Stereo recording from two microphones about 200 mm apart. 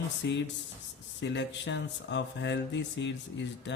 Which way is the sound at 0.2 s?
60° left (ahead or behind).